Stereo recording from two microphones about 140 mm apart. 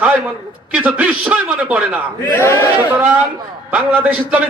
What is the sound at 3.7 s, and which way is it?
Speech, 10° right (ahead or behind).